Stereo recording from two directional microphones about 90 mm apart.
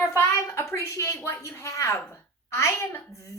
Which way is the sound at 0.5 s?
35° left (ahead or behind).